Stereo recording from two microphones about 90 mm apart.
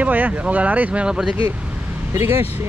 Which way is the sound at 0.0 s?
20° right (ahead or behind).